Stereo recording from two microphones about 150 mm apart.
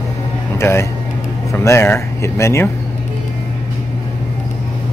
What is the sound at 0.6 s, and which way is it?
Speech, 20° left (ahead or behind).